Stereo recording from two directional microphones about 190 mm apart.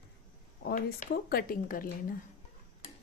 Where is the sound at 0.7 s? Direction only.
50° left (ahead or behind).